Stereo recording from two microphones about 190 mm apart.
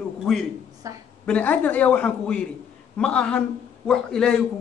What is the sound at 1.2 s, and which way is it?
A man's voice, 5° left (ahead or behind).